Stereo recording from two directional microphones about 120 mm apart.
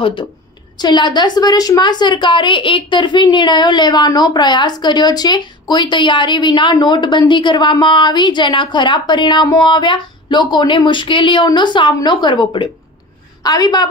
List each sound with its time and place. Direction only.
0.0 s a woman's voice: 45° left (ahead or behind)